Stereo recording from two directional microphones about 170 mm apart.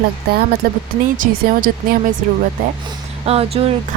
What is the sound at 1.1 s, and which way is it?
Speech, 55° right (ahead or behind).